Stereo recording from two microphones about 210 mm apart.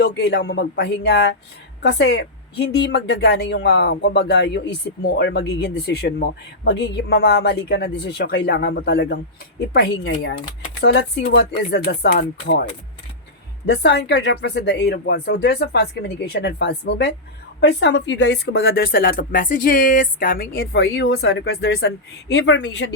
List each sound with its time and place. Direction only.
0.0 s a woman's voice: 50° left (ahead or behind)
13.7 s a woman's voice: 50° left (ahead or behind)